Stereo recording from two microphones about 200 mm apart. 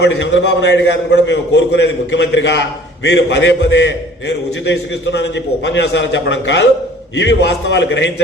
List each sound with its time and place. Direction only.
0.0 s a man's voice: 60° left (ahead or behind)